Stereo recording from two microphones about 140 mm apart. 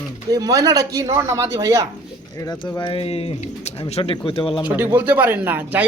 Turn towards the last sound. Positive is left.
turn(degrees=-15)  # may be behind; listen again after turning